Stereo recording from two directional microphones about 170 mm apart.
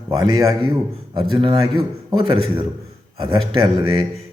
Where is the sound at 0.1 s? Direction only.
25° right (ahead or behind).